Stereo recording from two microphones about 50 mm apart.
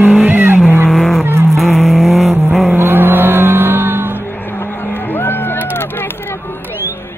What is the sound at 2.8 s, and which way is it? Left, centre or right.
Music, right.